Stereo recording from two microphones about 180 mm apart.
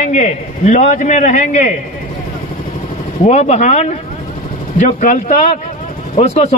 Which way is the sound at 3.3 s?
40° left (ahead or behind).